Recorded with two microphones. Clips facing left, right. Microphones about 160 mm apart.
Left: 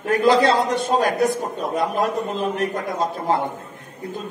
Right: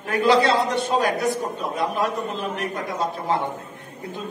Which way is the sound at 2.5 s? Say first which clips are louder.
Left 4 dB; 40° left (ahead or behind).